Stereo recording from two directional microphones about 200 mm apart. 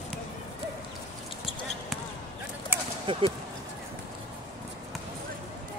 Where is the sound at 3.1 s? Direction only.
25° right (ahead or behind).